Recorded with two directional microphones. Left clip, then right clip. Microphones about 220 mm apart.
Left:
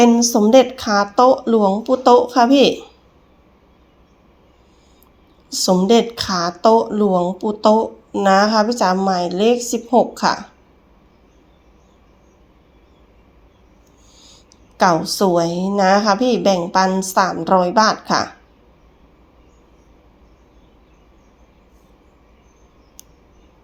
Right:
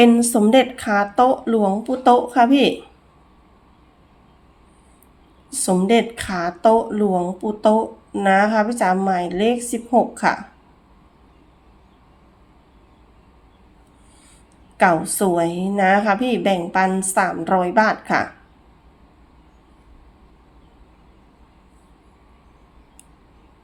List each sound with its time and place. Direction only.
0.0 s a woman's voice: 20° right (ahead or behind)
0.8 s speech: 10° left (ahead or behind)
5.5 s speech: 10° left (ahead or behind)
14.8 s speech: 10° left (ahead or behind)
15.8 s speech: 5° right (ahead or behind)
16.0 s speech: 10° left (ahead or behind)